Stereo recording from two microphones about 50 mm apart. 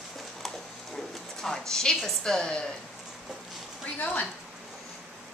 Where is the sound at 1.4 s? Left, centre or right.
Centre.